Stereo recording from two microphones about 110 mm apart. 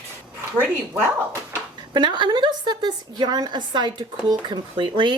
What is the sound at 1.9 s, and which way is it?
A woman's voice, 45° right (ahead or behind).